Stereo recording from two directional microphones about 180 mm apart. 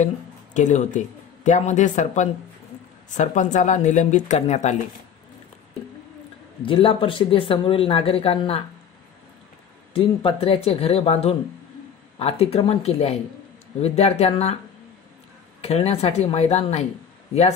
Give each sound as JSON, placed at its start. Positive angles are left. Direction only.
{"t": 0.6, "sound": "a woman's voice", "side_deg": 45}
{"t": 6.6, "sound": "speech", "side_deg": 30}
{"t": 9.9, "sound": "a woman's voice", "side_deg": 30}
{"t": 15.6, "sound": "a woman's voice", "side_deg": 35}